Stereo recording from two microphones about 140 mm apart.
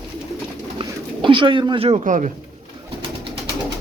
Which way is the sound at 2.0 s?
65° right (ahead or behind).